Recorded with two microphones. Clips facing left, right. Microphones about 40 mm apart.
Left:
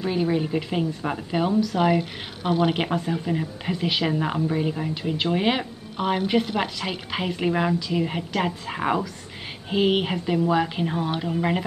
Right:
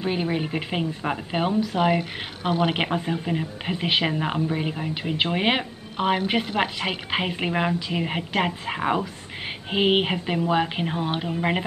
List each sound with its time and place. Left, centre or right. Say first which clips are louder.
0.0 s a woman's voice: left 2 dB; right
4.1 s a woman's voice: left 1 dB; centre
4.9 s a woman's voice: right 2 dB; right
5.9 s a woman's voice: even; right